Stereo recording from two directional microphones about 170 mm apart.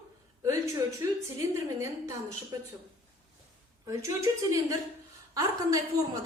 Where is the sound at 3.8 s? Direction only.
20° right (ahead or behind).